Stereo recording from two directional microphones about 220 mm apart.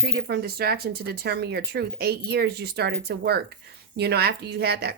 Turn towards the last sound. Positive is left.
turn(degrees=-45)  # may be behind; listen again after turning